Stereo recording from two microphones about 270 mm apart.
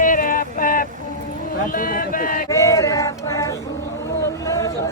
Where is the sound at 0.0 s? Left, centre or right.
Left.